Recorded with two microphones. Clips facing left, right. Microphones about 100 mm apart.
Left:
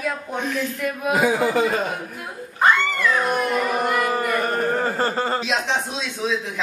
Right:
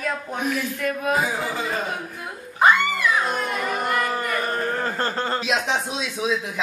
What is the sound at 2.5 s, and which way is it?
Speech, 10° right (ahead or behind).